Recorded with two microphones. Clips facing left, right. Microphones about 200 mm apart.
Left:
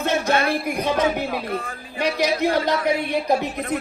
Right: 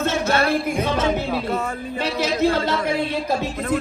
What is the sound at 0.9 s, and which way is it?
Speech, 15° left (ahead or behind).